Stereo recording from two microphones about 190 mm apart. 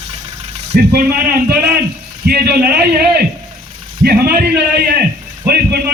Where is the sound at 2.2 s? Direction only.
55° right (ahead or behind).